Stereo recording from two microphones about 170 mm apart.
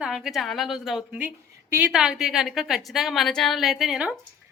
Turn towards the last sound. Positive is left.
turn(degrees=-5)  # may be behind; listen again after turning